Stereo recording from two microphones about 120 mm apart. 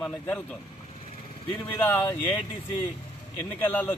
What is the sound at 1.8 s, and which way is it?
Speech, 15° left (ahead or behind).